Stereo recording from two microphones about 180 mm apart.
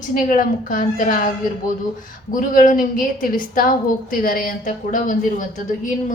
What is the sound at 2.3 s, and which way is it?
A woman's voice, 45° left (ahead or behind).